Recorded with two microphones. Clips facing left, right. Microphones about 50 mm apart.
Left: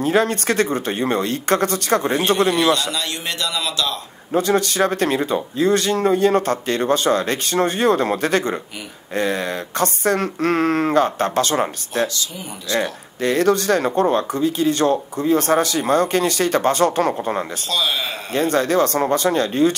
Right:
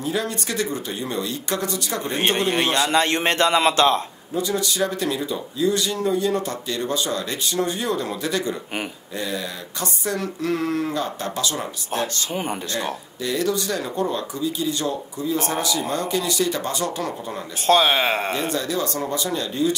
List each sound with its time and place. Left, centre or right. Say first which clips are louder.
0.0 s speech: left 8 dB; left
2.1 s a man's voice: right 1 dB; right
4.3 s speech: left 6 dB; left
17.6 s a man's voice: right 9 dB; right
18.3 s speech: left 7 dB; left